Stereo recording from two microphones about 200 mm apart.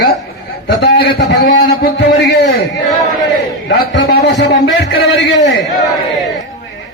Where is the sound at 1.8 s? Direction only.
60° left (ahead or behind).